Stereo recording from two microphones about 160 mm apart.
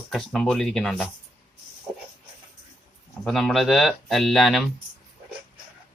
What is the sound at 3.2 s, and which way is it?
Speech, centre (ahead or behind).